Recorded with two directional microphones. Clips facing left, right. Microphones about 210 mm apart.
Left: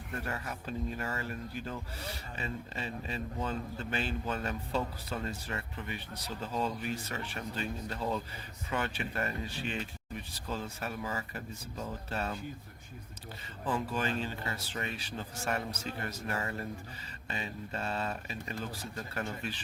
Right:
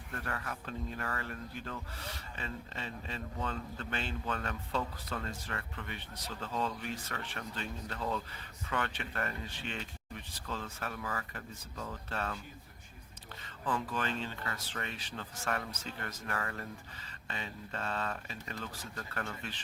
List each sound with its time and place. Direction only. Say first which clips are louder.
0.3 s a man's voice: even; 20° left (ahead or behind)
13.8 s a man's voice: left 3 dB; 10° left (ahead or behind)
16.2 s speech: left 2 dB; 25° left (ahead or behind)
17.2 s a man's voice: left 3 dB; 10° left (ahead or behind)